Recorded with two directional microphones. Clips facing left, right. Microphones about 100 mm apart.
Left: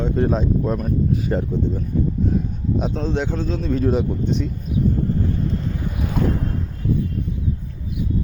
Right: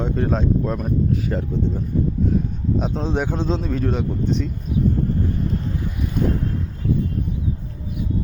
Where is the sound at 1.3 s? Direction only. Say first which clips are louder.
Left 3 dB; 30° left (ahead or behind).